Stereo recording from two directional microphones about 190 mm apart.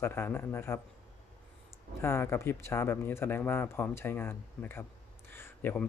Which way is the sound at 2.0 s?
15° left (ahead or behind).